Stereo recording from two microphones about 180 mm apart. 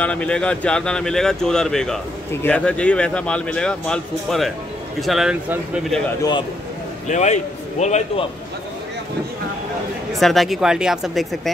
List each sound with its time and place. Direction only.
0.0 s a man's voice: 5° left (ahead or behind)
7.1 s a man's voice: 40° left (ahead or behind)
10.1 s a man's voice: centre (ahead or behind)